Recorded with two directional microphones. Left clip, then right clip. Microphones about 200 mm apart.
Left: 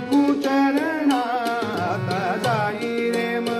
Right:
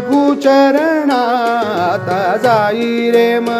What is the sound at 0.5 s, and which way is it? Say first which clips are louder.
Music: right 11 dB; 60° right (ahead or behind).